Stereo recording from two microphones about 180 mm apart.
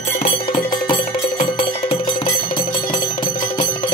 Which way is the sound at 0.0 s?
30° left (ahead or behind).